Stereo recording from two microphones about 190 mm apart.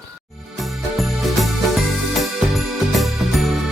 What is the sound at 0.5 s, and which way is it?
Music, centre (ahead or behind).